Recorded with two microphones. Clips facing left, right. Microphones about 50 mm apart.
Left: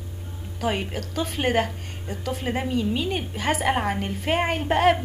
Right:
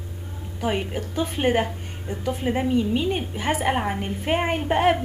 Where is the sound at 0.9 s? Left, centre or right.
Centre.